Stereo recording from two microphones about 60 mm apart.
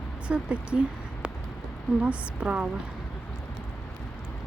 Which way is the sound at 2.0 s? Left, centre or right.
Right.